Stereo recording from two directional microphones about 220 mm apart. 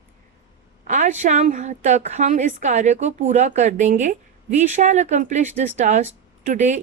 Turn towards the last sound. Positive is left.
turn(degrees=-35)  # may be behind; listen again after turning